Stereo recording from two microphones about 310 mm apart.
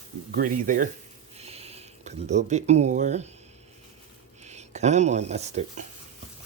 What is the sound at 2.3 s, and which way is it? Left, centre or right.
Speech, right.